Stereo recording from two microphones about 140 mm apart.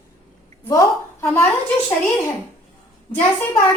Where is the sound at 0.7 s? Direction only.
20° left (ahead or behind).